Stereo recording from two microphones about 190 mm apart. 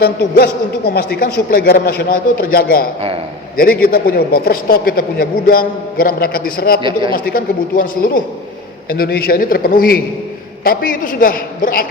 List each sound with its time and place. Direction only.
0.0 s a man's voice: 55° left (ahead or behind)